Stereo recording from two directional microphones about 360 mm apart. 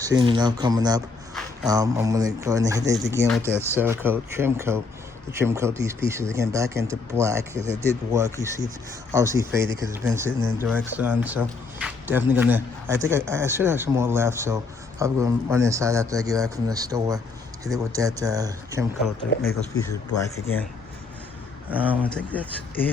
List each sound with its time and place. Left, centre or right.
0.0 s speech: centre
19.4 s speech: left
19.9 s speech: centre
21.7 s speech: centre